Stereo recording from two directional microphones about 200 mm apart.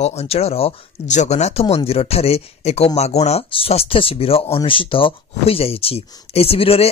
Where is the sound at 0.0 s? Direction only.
30° left (ahead or behind).